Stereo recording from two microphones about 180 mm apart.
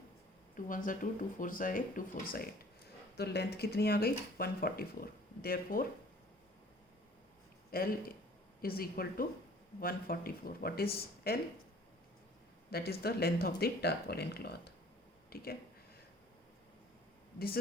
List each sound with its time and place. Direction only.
0.5 s speech: 50° left (ahead or behind)
3.2 s speech: 65° left (ahead or behind)
7.7 s speech: 55° left (ahead or behind)
12.7 s speech: 60° left (ahead or behind)